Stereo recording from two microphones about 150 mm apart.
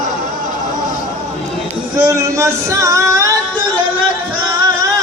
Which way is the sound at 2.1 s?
20° right (ahead or behind).